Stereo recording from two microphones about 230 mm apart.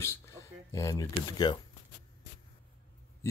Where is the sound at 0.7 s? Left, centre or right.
Centre.